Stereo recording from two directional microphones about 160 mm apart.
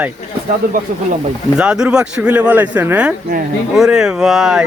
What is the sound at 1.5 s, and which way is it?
Speech, 5° right (ahead or behind).